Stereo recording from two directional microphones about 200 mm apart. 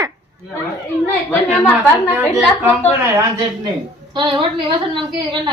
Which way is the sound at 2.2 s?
5° left (ahead or behind).